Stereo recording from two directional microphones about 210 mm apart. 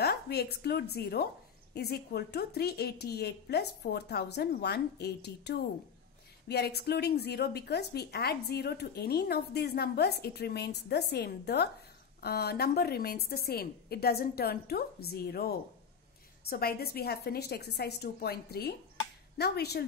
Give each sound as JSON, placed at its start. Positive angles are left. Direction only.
{"t": 0.0, "sound": "a woman's voice", "side_deg": 50}